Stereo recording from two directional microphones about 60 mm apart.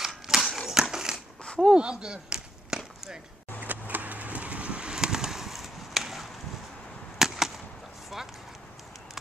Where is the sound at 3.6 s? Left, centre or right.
Right; by 8.3 s centre.